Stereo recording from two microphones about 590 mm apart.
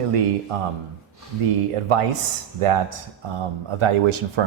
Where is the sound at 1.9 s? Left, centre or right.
Right.